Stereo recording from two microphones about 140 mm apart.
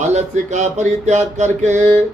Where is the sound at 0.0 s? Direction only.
55° right (ahead or behind).